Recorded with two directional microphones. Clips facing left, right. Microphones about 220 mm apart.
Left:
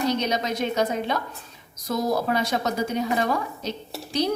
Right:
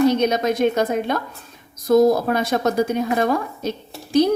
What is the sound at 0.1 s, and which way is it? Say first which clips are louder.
A woman's voice: right 6 dB; 50° right (ahead or behind).